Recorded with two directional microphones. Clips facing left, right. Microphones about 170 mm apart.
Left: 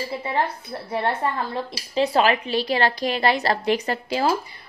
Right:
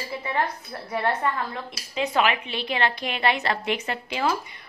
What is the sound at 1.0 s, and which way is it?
A woman's voice, 30° left (ahead or behind).